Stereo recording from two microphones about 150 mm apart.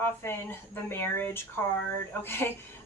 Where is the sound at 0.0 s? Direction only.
15° left (ahead or behind).